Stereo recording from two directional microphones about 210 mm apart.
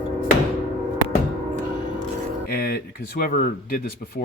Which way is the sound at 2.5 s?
45° left (ahead or behind).